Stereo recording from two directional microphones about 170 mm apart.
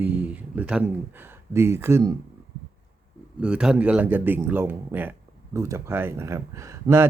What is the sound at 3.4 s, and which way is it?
Speech, 5° right (ahead or behind).